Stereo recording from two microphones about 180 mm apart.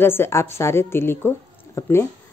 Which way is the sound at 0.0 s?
15° left (ahead or behind).